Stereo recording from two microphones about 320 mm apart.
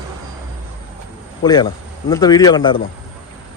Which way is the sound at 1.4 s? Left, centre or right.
Centre.